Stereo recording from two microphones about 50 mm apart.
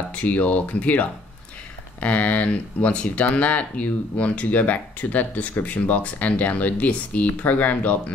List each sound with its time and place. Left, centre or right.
0.1 s speech: left